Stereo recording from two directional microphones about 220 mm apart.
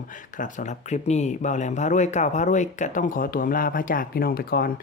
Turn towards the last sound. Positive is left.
turn(degrees=40)  # may be behind; listen again after turning